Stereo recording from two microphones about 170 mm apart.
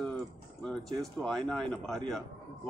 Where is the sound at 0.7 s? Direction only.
Centre (ahead or behind).